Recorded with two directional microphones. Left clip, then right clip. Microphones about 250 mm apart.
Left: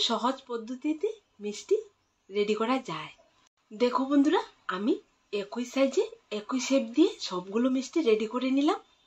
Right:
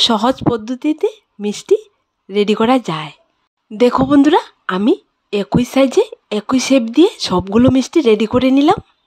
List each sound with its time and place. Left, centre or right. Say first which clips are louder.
0.0 s speech: right 15 dB; right